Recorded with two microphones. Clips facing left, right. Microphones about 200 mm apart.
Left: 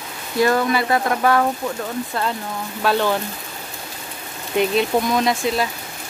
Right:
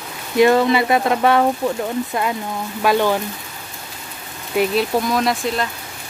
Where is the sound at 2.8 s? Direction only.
10° right (ahead or behind).